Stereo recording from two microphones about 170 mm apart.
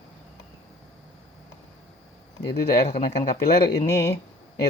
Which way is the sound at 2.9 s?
60° left (ahead or behind).